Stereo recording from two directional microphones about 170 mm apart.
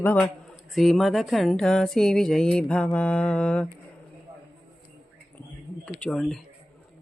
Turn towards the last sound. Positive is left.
turn(degrees=5)  # may be behind; listen again after turning